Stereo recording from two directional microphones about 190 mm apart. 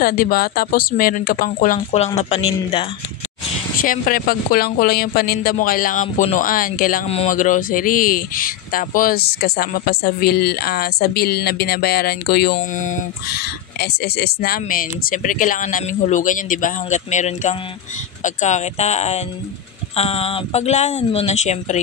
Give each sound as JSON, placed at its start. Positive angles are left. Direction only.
{"t": 0.0, "sound": "speech", "side_deg": 50}
{"t": 3.8, "sound": "speech", "side_deg": 45}
{"t": 13.4, "sound": "speech", "side_deg": 55}